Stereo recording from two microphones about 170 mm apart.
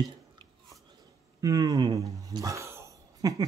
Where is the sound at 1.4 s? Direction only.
20° right (ahead or behind).